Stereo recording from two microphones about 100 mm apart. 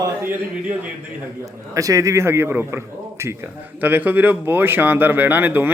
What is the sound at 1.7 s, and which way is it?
A man's voice, 35° right (ahead or behind).